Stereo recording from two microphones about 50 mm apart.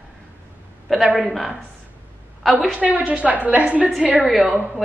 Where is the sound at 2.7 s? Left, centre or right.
Right.